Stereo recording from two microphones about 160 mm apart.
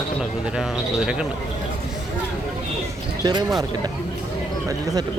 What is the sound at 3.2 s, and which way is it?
Speech, 25° right (ahead or behind).